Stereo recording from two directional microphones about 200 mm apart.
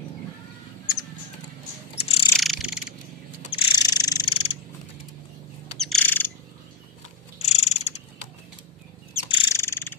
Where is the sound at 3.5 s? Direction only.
20° left (ahead or behind).